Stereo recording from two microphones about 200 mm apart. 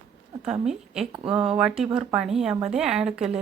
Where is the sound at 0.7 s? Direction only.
Centre (ahead or behind).